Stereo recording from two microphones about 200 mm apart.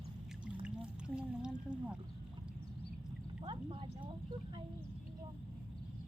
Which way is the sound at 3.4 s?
25° right (ahead or behind).